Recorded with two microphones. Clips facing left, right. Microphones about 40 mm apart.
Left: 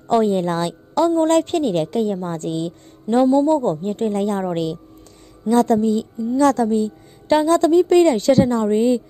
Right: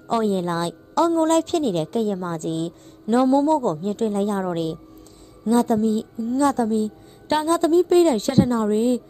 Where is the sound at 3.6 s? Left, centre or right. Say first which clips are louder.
Left 2 dB; left.